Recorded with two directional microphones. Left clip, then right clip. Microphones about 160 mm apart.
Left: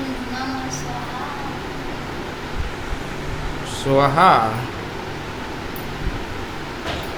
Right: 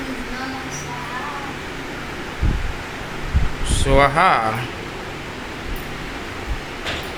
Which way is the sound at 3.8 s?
Centre (ahead or behind).